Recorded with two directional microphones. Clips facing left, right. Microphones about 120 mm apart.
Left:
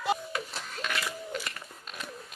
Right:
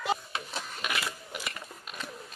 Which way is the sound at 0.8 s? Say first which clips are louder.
Left 2 dB; 10° right (ahead or behind).